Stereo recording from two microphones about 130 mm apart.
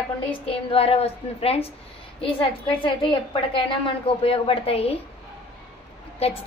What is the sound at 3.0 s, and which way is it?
A woman's voice, 40° left (ahead or behind).